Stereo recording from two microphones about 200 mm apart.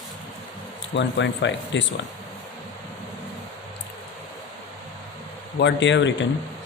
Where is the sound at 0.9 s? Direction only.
65° left (ahead or behind).